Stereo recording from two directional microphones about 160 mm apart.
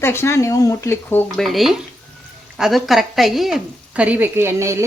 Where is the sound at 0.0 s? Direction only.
15° left (ahead or behind).